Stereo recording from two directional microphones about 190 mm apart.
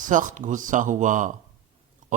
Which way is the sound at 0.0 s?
45° right (ahead or behind).